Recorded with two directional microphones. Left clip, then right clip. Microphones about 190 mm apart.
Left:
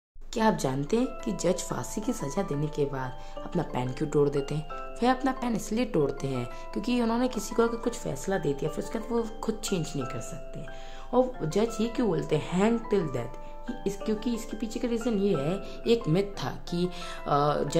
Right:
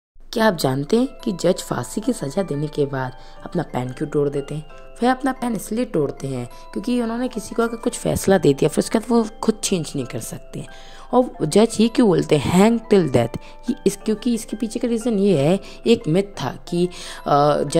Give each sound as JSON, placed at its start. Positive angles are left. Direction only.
{"t": 0.3, "sound": "speech", "side_deg": -35}
{"t": 4.0, "sound": "a woman's voice", "side_deg": -15}
{"t": 7.8, "sound": "speech", "side_deg": -40}